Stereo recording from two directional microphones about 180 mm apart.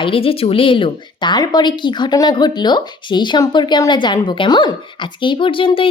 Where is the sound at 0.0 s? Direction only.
30° left (ahead or behind).